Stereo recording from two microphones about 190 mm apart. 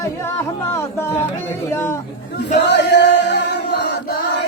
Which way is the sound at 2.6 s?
65° left (ahead or behind).